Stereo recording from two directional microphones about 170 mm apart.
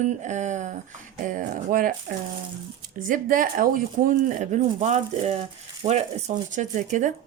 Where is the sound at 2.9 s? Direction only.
55° right (ahead or behind).